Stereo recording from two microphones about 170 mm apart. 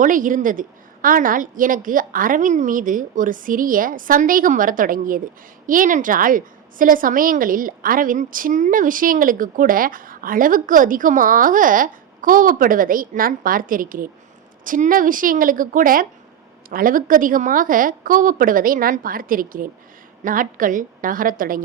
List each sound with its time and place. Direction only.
0.0 s a woman's voice: 50° right (ahead or behind)